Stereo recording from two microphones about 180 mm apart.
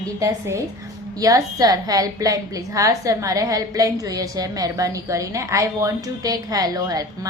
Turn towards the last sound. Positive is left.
turn(degrees=-20)  # may be behind; listen again after turning